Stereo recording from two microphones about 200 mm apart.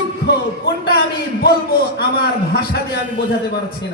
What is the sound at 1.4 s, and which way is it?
A man's voice, 50° left (ahead or behind).